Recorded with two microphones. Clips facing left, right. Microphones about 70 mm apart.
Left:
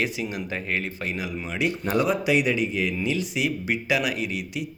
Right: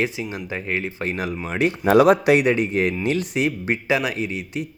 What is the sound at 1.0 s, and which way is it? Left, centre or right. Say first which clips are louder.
Speech: right 4 dB; right.